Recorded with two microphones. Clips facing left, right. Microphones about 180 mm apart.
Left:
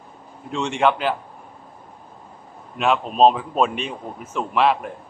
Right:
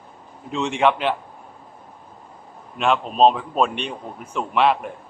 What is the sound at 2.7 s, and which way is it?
A man's voice, centre (ahead or behind).